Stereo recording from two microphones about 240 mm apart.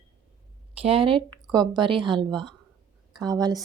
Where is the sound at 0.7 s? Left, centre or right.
Right.